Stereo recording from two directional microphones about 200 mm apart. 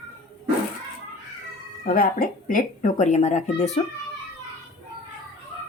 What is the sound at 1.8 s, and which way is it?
Speech, 45° left (ahead or behind).